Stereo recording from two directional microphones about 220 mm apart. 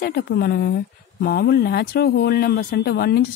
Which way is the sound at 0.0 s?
45° left (ahead or behind).